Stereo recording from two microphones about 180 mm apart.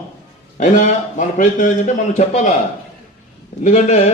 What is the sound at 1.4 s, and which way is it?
A man's voice, 45° left (ahead or behind).